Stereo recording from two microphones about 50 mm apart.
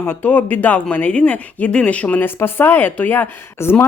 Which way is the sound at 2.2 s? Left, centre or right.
Left.